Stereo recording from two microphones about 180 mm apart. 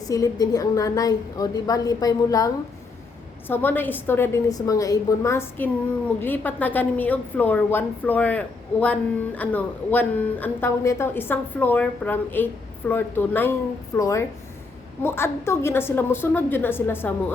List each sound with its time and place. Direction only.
0.1 s a woman's voice: 20° left (ahead or behind)